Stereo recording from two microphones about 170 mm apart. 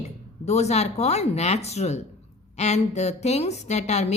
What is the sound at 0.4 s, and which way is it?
A woman's voice, 40° left (ahead or behind).